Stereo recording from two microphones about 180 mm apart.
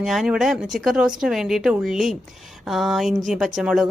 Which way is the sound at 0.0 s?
Centre (ahead or behind).